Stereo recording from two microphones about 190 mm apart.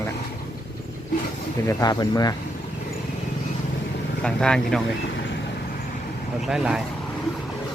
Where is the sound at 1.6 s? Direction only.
20° left (ahead or behind).